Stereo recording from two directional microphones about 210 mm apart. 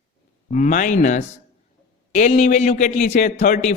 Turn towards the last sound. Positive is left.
turn(degrees=35)  # may be behind; listen again after turning